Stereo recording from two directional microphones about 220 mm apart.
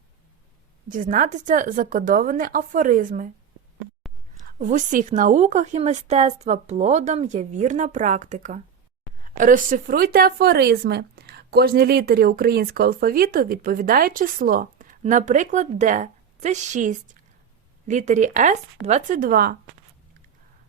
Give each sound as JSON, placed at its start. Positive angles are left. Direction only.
{"t": 0.9, "sound": "speech", "side_deg": -35}
{"t": 4.5, "sound": "speech", "side_deg": -35}